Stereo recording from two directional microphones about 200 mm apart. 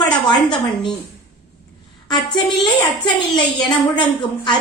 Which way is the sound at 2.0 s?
20° left (ahead or behind).